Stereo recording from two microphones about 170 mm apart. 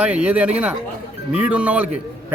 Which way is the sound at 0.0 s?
5° right (ahead or behind).